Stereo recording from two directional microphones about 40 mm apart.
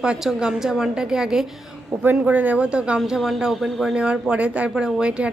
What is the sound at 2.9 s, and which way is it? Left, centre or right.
Speech, centre.